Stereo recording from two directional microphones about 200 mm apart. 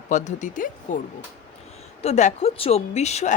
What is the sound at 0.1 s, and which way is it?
A woman's voice, 35° left (ahead or behind).